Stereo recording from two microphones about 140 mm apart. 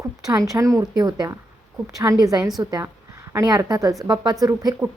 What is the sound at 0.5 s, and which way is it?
A woman's voice, 25° right (ahead or behind).